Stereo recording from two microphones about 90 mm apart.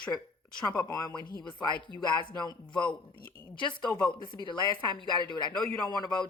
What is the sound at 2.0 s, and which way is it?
Speech, 60° left (ahead or behind).